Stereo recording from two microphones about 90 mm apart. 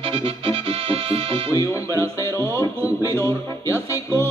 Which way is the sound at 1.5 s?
35° left (ahead or behind).